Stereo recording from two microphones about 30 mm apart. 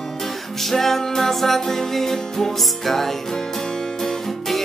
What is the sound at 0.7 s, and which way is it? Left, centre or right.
Music, centre.